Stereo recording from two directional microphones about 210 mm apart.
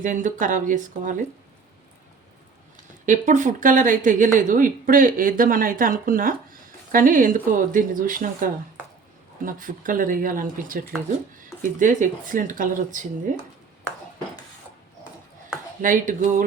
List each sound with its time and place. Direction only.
0.0 s speech: 35° right (ahead or behind)
3.1 s speech: 35° right (ahead or behind)
15.8 s speech: 40° right (ahead or behind)